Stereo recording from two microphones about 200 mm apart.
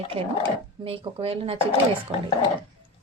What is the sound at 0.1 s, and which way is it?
A woman's voice, 30° right (ahead or behind).